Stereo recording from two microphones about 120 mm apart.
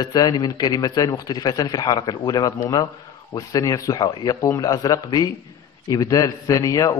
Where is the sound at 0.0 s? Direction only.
35° left (ahead or behind).